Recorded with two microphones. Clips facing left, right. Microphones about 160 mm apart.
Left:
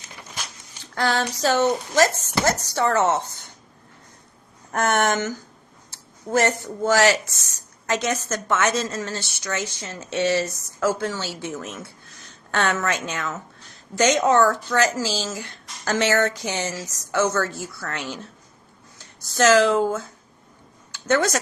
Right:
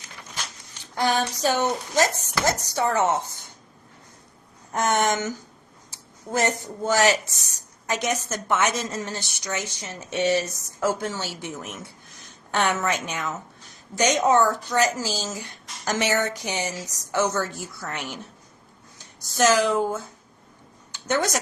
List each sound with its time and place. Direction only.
0.8 s a sound: 15° right (ahead or behind)
1.4 s speech: 15° right (ahead or behind)
4.7 s speech: 15° right (ahead or behind)
21.1 s speech: 15° right (ahead or behind)